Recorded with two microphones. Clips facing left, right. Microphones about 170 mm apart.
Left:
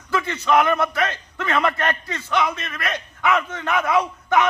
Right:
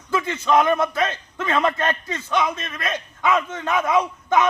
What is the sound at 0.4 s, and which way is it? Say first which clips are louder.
A man's voice: even; 20° right (ahead or behind).